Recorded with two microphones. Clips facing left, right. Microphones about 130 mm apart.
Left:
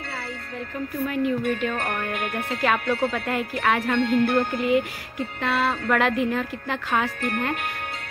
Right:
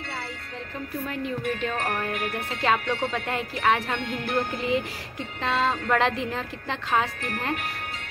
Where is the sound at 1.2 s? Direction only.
30° right (ahead or behind).